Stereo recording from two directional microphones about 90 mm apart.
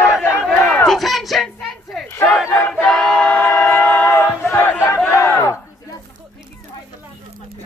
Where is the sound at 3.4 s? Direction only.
20° left (ahead or behind).